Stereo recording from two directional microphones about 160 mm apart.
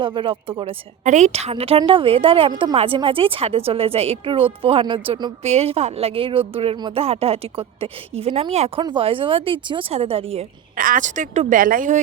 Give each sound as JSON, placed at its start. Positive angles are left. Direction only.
{"t": 0.0, "sound": "speech", "side_deg": -30}
{"t": 1.0, "sound": "speech", "side_deg": -45}
{"t": 5.4, "sound": "speech", "side_deg": -40}
{"t": 10.8, "sound": "a woman's voice", "side_deg": -60}